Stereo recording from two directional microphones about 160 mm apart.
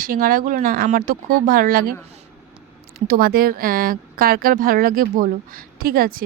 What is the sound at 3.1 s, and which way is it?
Speech, 65° right (ahead or behind).